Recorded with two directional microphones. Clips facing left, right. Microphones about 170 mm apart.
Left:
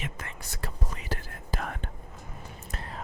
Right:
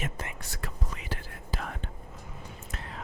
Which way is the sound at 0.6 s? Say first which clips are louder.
Left 2 dB; 40° left (ahead or behind).